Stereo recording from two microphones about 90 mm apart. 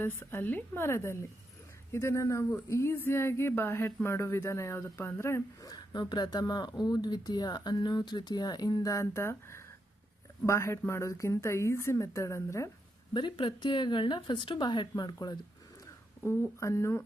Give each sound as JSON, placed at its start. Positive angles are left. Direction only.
{"t": 0.0, "sound": "speech", "side_deg": 25}
{"t": 5.6, "sound": "speech", "side_deg": 50}
{"t": 13.1, "sound": "a woman's voice", "side_deg": 65}
{"t": 16.6, "sound": "speech", "side_deg": 35}